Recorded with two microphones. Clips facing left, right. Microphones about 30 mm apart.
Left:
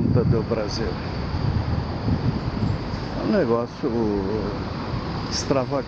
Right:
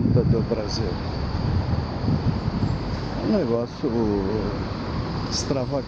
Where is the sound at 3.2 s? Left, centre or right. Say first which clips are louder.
Left 2 dB; centre.